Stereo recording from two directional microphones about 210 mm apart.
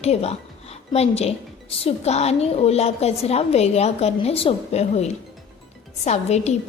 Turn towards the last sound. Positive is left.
turn(degrees=30)  # may be behind; listen again after turning